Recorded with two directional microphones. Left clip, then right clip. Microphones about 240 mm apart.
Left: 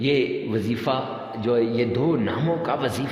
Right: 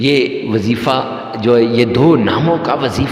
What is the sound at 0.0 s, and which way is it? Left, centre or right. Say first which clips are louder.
A man's voice: right 8 dB; right.